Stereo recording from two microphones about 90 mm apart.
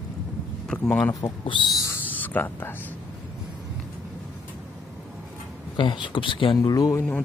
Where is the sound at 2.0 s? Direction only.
20° left (ahead or behind).